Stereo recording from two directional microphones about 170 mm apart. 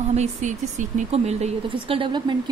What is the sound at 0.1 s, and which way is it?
Speech, 40° right (ahead or behind).